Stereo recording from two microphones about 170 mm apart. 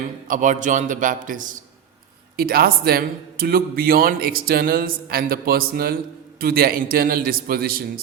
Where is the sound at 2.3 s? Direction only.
60° right (ahead or behind).